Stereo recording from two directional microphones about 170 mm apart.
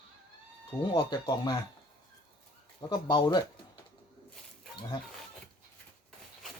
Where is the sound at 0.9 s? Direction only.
25° left (ahead or behind).